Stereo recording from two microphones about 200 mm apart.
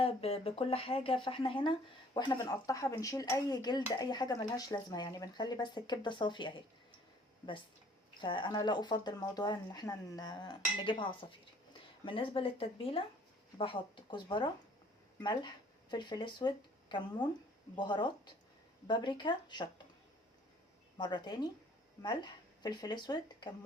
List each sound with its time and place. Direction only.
0.0 s speech: 30° left (ahead or behind)
8.2 s speech: 25° left (ahead or behind)
21.0 s speech: 20° left (ahead or behind)